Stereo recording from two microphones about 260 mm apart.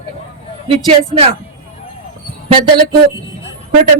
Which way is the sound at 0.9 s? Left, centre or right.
Right.